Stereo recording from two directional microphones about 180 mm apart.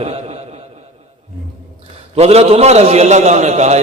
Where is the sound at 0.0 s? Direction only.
35° right (ahead or behind).